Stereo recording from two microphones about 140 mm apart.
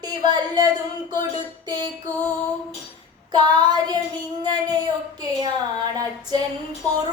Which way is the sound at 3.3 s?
30° right (ahead or behind).